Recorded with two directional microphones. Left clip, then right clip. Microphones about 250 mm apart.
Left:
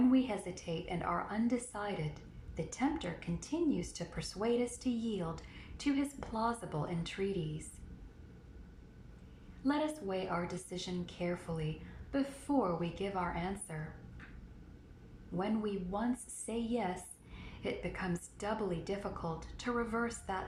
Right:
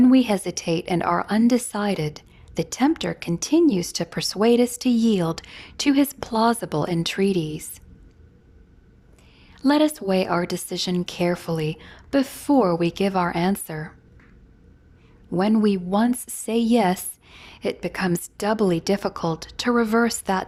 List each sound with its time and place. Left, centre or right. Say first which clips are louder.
0.1 s a woman's voice: right 14 dB; right
9.6 s a woman's voice: right 16 dB; right
15.4 s a woman's voice: right 16 dB; right